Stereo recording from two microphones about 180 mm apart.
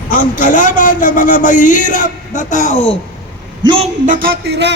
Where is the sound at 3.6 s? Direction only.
30° right (ahead or behind).